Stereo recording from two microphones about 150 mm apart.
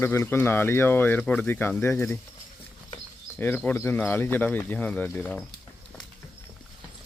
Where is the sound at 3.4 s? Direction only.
10° left (ahead or behind).